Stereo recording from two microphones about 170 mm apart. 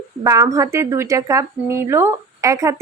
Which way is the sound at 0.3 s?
20° right (ahead or behind).